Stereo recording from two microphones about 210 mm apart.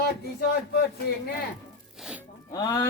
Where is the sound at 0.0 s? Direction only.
50° left (ahead or behind).